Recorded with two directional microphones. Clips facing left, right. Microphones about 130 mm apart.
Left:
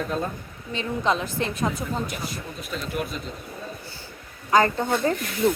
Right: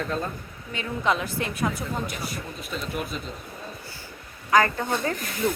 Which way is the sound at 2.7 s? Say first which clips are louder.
Left 2 dB; centre (ahead or behind).